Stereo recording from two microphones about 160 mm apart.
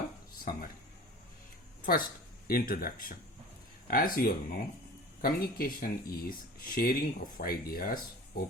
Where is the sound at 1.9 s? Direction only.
70° left (ahead or behind).